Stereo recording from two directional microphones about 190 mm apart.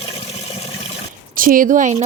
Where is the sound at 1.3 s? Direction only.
45° right (ahead or behind).